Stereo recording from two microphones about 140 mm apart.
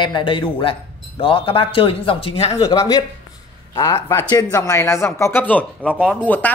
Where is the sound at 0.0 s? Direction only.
35° left (ahead or behind).